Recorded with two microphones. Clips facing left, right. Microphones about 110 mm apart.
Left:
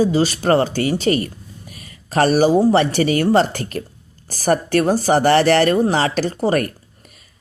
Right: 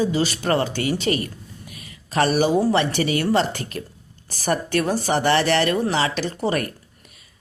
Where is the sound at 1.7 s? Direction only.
40° left (ahead or behind).